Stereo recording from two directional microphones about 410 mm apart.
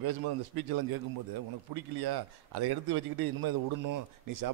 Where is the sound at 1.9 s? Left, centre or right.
Right.